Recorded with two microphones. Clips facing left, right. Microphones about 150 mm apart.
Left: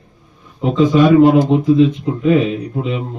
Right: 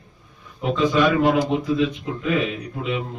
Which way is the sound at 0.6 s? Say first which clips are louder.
Left 7 dB; 25° left (ahead or behind).